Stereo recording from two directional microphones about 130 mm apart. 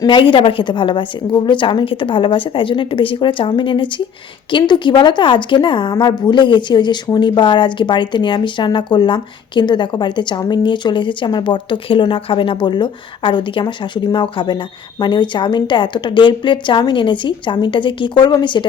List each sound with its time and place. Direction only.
0.1 s speech: 40° left (ahead or behind)